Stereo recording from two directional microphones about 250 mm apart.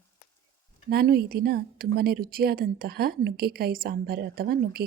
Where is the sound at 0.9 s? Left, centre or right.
Right.